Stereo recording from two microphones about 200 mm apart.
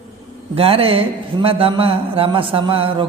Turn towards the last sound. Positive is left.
turn(degrees=-25)  # may be behind; listen again after turning